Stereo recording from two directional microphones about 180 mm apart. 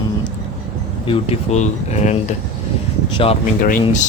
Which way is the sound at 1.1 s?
35° left (ahead or behind).